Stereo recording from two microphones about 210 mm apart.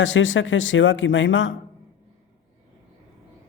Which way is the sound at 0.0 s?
65° left (ahead or behind).